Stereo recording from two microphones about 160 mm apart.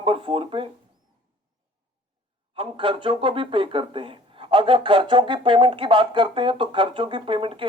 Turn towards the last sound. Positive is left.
turn(degrees=-35)  # may be behind; listen again after turning